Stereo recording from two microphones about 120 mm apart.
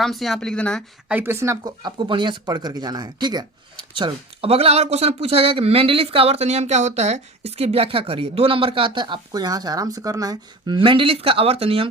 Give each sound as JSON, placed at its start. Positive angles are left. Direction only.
{"t": 0.0, "sound": "speech", "side_deg": 0}
{"t": 1.2, "sound": "speech", "side_deg": -20}
{"t": 1.6, "sound": "speech", "side_deg": -40}
{"t": 10.8, "sound": "speech", "side_deg": -45}